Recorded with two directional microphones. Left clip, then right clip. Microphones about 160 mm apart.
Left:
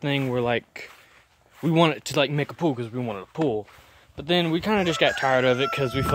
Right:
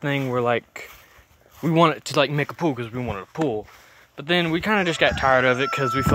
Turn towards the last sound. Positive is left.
turn(degrees=25)  # may be behind; listen again after turning